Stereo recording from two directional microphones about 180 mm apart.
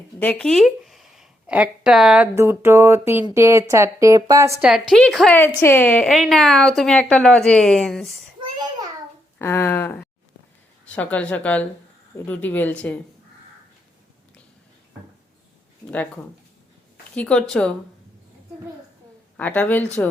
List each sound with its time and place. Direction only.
0.2 s a woman's voice: 5° left (ahead or behind); by 4.6 s 15° right (ahead or behind)
4.6 s a woman's voice: 5° right (ahead or behind)
8.5 s a sound: 25° right (ahead or behind)
9.4 s speech: 15° left (ahead or behind)
17.2 s a woman's voice: 5° left (ahead or behind)
19.4 s speech: 10° left (ahead or behind)